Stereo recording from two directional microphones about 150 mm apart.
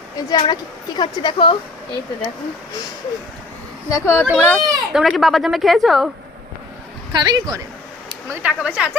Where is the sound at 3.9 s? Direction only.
20° left (ahead or behind).